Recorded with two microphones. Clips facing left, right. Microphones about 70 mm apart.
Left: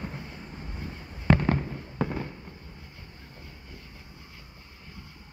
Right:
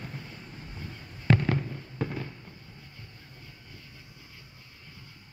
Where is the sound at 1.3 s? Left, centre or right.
Left.